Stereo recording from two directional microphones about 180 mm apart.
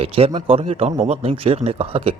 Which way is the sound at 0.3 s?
30° right (ahead or behind).